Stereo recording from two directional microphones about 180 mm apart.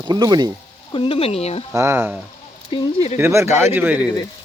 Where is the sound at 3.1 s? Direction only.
15° right (ahead or behind).